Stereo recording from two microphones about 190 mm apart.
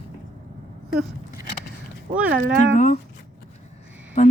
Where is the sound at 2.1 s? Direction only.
50° right (ahead or behind).